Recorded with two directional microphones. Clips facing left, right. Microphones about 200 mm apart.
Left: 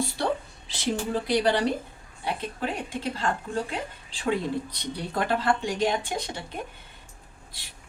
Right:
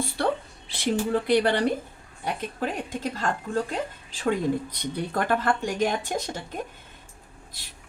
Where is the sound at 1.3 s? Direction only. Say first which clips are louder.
Right 1 dB; 55° right (ahead or behind).